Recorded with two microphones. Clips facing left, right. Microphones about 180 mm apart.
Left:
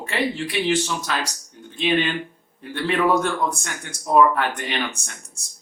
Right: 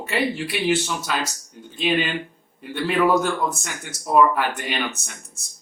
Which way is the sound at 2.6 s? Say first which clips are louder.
Right 1 dB; 5° right (ahead or behind).